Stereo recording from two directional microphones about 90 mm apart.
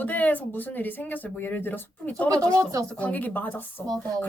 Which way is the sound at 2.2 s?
40° right (ahead or behind).